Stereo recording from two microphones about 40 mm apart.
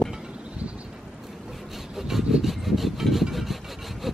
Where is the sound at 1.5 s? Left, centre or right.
Centre.